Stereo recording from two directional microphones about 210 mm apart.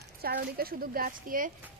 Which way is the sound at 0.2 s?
45° right (ahead or behind).